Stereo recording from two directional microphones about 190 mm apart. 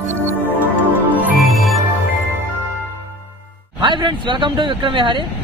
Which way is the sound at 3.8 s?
25° right (ahead or behind).